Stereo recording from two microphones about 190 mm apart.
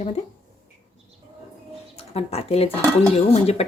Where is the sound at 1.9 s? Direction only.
30° left (ahead or behind).